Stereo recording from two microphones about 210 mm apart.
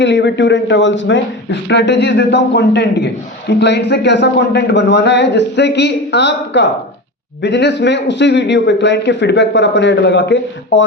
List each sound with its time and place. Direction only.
0.0 s a man's voice: 55° left (ahead or behind)